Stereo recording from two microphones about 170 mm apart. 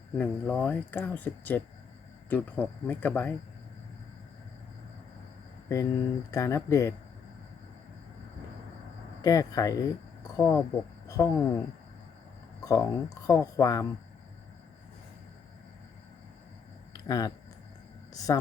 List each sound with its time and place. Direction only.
0.2 s speech: 10° left (ahead or behind)
5.6 s speech: 15° left (ahead or behind)
9.2 s speech: 20° left (ahead or behind)
12.6 s speech: 20° left (ahead or behind)
16.9 s a sound: 20° left (ahead or behind)
18.2 s speech: 20° left (ahead or behind)